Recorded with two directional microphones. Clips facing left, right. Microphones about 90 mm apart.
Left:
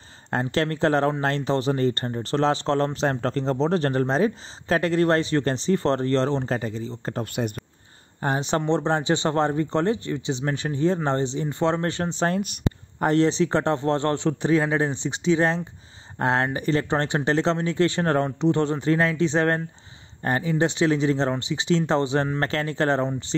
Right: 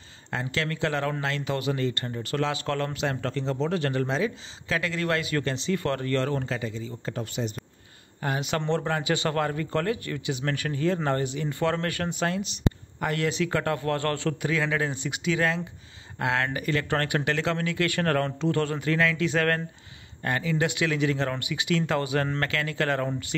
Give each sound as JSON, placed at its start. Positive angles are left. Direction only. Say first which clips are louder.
{"t": 0.3, "sound": "speech", "louder": "left 6 dB", "side_deg": 40}
{"t": 6.5, "sound": "speech", "louder": "left 5 dB", "side_deg": 45}
{"t": 7.4, "sound": "speech", "louder": "left 4 dB", "side_deg": 55}
{"t": 8.2, "sound": "speech", "louder": "left 4 dB", "side_deg": 30}
{"t": 12.3, "sound": "speech", "louder": "left 4 dB", "side_deg": 50}
{"t": 13.0, "sound": "speech", "louder": "left 7 dB", "side_deg": 30}
{"t": 14.5, "sound": "speech", "louder": "left 7 dB", "side_deg": 35}